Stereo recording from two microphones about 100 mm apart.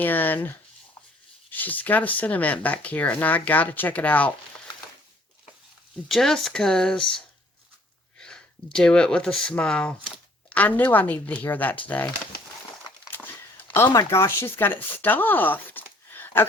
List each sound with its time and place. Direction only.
0.0 s speech: 20° left (ahead or behind)
1.5 s speech: 15° left (ahead or behind)
6.1 s speech: 5° left (ahead or behind)
8.2 s speech: 5° left (ahead or behind)
13.1 s a sound: 20° left (ahead or behind)
14.1 s speech: 25° left (ahead or behind)